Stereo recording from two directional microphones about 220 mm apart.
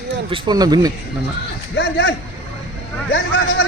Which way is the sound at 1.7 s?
50° left (ahead or behind).